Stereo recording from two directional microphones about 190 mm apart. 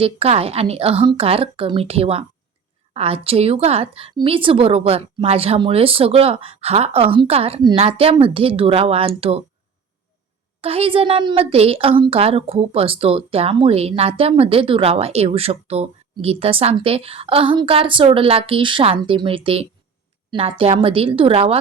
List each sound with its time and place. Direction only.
0.0 s a woman's voice: 30° right (ahead or behind)
10.6 s a woman's voice: 30° right (ahead or behind)